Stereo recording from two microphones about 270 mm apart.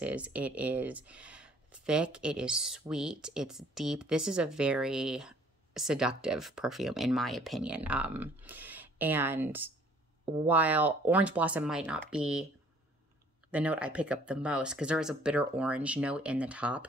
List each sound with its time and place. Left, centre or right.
0.0 s speech: centre
13.5 s speech: centre